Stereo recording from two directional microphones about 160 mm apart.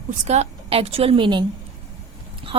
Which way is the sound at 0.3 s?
40° right (ahead or behind).